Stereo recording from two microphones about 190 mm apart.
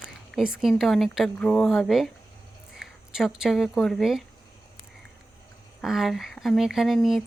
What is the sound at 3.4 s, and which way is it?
Speech, centre (ahead or behind).